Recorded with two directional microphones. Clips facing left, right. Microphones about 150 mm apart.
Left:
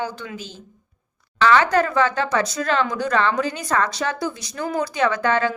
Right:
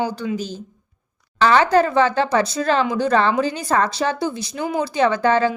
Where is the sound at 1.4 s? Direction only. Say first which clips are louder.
Right 2 dB; 30° right (ahead or behind).